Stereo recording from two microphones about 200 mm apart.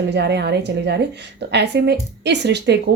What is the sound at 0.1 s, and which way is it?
A woman's voice, 60° right (ahead or behind).